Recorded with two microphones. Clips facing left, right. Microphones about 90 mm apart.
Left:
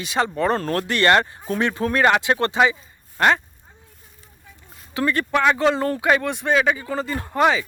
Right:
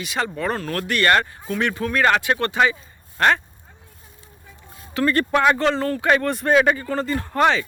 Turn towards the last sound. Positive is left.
turn(degrees=5)  # may be behind; listen again after turning